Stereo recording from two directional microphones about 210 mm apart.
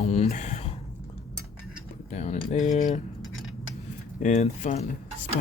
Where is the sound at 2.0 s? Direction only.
30° left (ahead or behind).